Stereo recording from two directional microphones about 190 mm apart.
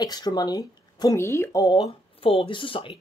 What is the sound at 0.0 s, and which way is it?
Speech, 20° left (ahead or behind).